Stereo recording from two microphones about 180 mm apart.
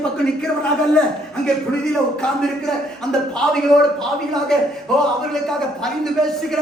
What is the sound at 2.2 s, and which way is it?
Speech, 5° left (ahead or behind).